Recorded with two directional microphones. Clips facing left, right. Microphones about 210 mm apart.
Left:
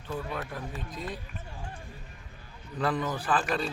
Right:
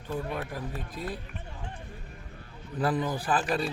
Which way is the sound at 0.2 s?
35° right (ahead or behind).